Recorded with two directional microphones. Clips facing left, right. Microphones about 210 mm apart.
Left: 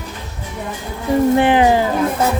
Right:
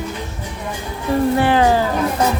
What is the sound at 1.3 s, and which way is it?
Speech, 20° left (ahead or behind).